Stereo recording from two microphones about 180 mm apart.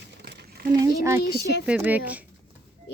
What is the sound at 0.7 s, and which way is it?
Speech, 20° right (ahead or behind).